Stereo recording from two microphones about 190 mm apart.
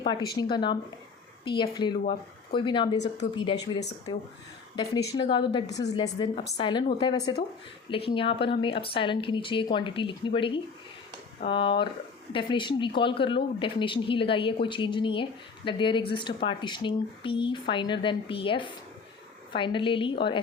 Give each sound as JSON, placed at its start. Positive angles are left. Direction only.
{"t": 0.3, "sound": "speech", "side_deg": 25}
{"t": 5.1, "sound": "speech", "side_deg": 25}